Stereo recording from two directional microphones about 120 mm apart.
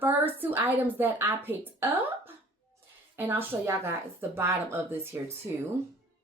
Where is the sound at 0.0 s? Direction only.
15° right (ahead or behind).